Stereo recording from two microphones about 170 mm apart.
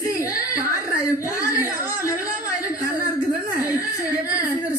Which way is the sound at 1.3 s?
20° left (ahead or behind).